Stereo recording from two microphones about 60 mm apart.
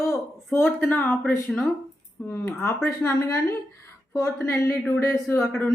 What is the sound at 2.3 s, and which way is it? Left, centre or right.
Speech, left.